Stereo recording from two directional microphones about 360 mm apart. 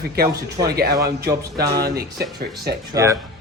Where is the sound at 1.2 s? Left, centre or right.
Centre.